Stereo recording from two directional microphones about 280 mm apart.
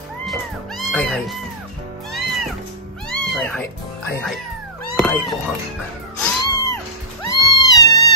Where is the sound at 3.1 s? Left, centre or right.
Centre.